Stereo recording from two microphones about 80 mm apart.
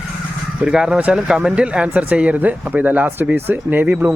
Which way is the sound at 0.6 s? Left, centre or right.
Centre.